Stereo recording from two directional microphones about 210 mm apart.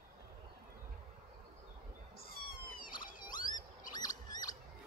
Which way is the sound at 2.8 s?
40° left (ahead or behind).